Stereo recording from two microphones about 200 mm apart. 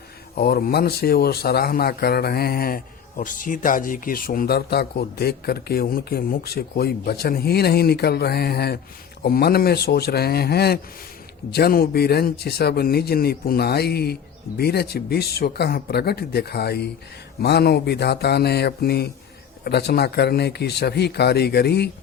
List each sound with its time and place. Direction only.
0.3 s speech: 50° left (ahead or behind)